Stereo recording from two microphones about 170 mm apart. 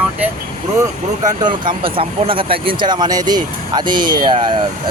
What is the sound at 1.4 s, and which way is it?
Speech, 30° right (ahead or behind).